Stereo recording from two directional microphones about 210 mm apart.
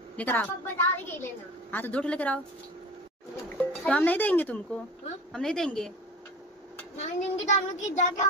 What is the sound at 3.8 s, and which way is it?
A woman's voice, 5° left (ahead or behind).